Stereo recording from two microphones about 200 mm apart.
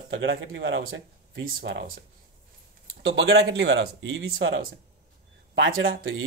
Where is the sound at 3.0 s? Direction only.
70° right (ahead or behind).